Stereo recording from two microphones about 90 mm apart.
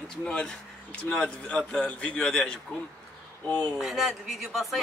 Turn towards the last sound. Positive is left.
turn(degrees=0)  # may be behind; listen again after turning